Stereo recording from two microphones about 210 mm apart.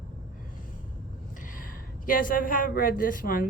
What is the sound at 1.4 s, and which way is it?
A woman's voice, 40° left (ahead or behind).